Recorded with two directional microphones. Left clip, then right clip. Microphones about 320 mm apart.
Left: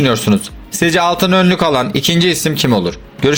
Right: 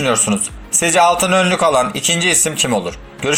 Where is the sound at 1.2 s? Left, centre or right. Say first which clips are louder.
Left 1 dB; left.